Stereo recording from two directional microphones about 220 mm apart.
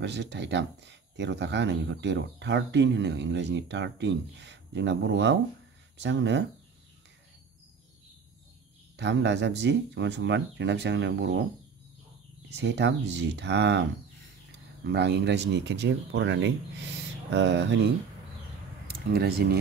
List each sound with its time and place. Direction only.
0.0 s speech: 50° right (ahead or behind)
8.9 s speech: 55° right (ahead or behind)
12.4 s speech: 50° right (ahead or behind)